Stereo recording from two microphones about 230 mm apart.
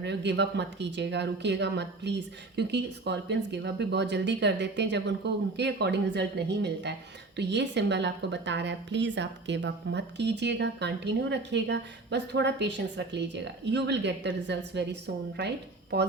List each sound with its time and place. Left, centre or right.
0.0 s a woman's voice: right